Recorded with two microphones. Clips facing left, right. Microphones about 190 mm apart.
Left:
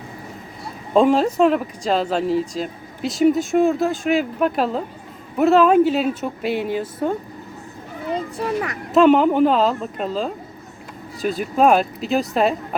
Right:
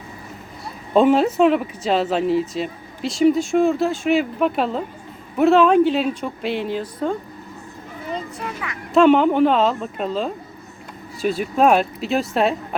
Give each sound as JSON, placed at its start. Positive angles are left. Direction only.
{"t": 0.9, "sound": "speech", "side_deg": -5}
{"t": 8.4, "sound": "speech", "side_deg": 40}
{"t": 8.9, "sound": "speech", "side_deg": 0}